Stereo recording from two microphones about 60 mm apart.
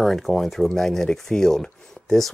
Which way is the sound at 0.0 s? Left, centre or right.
Centre.